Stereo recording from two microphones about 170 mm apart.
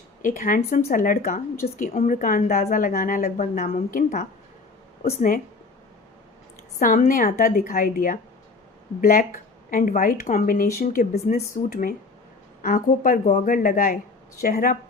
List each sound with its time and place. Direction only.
0.2 s a woman's voice: 55° left (ahead or behind)
6.7 s a woman's voice: 50° left (ahead or behind)